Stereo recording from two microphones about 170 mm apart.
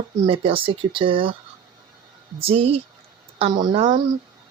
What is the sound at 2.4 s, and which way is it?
Speech, 35° right (ahead or behind).